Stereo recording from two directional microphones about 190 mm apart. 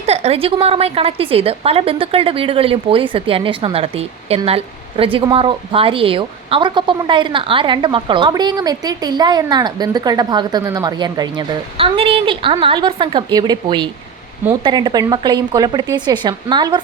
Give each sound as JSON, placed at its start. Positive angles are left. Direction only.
{"t": 0.0, "sound": "a woman's voice", "side_deg": -35}